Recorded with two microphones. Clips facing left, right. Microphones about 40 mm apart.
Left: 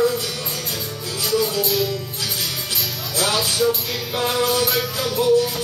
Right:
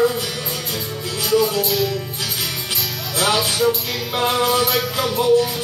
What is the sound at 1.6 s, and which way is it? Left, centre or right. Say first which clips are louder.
Music: right 1 dB; centre.